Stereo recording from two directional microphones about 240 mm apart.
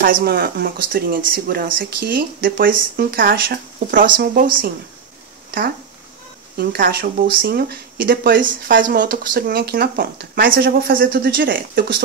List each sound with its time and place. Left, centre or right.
0.0 s speech: right
6.5 s speech: right